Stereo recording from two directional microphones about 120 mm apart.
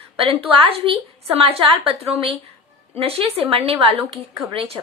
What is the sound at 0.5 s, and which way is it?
A woman's voice, 50° right (ahead or behind).